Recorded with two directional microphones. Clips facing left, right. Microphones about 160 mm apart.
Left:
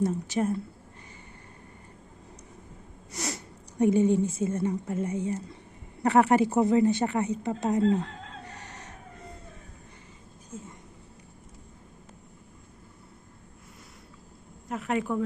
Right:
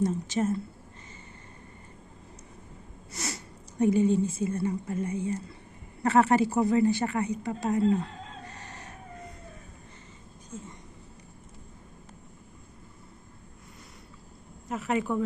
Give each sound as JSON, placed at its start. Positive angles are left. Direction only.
{"t": 0.0, "sound": "a woman's voice", "side_deg": 10}
{"t": 3.1, "sound": "speech", "side_deg": 20}
{"t": 14.7, "sound": "speech", "side_deg": 0}